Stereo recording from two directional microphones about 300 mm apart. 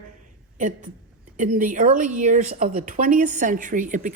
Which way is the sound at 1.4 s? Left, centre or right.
Right.